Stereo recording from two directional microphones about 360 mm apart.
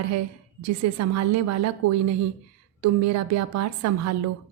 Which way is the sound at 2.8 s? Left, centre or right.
Right.